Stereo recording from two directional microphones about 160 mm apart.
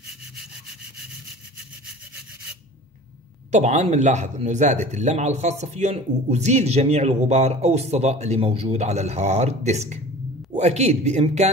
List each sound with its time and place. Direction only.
3.5 s speech: 50° right (ahead or behind)